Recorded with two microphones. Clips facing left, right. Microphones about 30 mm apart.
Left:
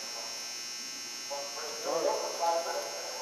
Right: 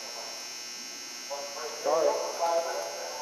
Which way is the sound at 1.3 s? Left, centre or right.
Centre.